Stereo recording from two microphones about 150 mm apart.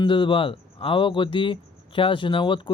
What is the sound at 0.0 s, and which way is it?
Speech, 35° left (ahead or behind).